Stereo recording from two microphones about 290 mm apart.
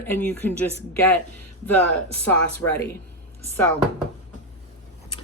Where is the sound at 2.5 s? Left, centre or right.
Centre.